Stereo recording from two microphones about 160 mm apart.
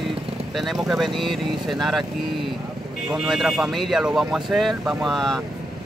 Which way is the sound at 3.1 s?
Centre (ahead or behind).